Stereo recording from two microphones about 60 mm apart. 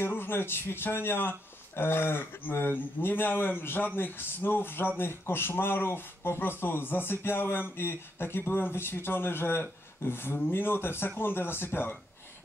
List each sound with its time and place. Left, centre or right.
0.0 s speech: left